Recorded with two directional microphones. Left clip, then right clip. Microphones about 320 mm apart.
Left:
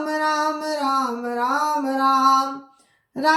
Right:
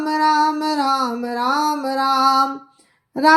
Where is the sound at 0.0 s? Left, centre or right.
Centre.